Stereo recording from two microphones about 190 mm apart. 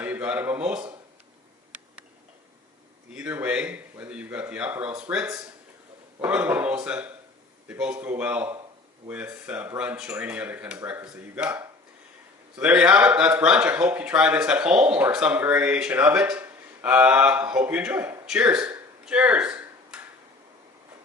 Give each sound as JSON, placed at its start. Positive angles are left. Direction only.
{"t": 0.0, "sound": "speech", "side_deg": -10}
{"t": 3.1, "sound": "a man's voice", "side_deg": -5}